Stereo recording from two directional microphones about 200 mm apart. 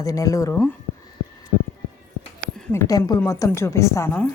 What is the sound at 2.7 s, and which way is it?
Speech, 15° left (ahead or behind).